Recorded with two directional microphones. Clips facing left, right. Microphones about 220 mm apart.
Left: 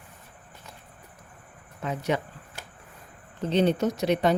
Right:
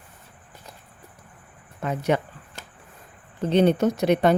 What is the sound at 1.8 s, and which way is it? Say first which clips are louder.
Speech: right 4 dB; 55° right (ahead or behind).